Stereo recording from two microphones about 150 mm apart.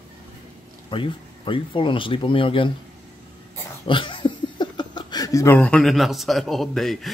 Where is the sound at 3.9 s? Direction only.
35° left (ahead or behind).